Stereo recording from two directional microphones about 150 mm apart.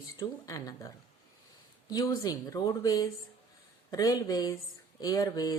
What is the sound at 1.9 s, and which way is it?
A woman's voice, 25° left (ahead or behind).